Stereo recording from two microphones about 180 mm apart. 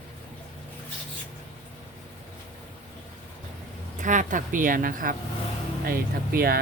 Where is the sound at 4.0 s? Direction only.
45° right (ahead or behind).